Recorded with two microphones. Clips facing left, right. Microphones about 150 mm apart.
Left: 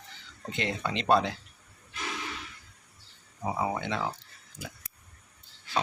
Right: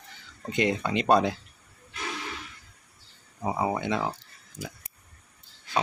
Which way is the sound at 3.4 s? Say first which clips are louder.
Right 3 dB; 20° right (ahead or behind).